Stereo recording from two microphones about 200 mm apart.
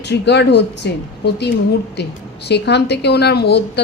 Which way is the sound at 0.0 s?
60° left (ahead or behind).